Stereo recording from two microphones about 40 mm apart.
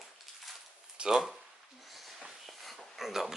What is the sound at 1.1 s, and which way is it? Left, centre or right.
Speech, centre.